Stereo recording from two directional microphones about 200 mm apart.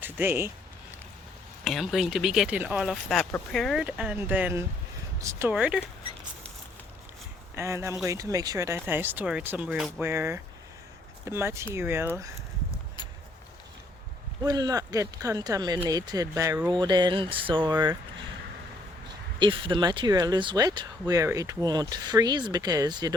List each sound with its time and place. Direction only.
0.0 s speech: 10° right (ahead or behind)
1.6 s speech: centre (ahead or behind)
7.5 s speech: 15° right (ahead or behind)
10.0 s speech: 10° right (ahead or behind)
14.4 s speech: 20° right (ahead or behind)
19.4 s speech: 25° right (ahead or behind)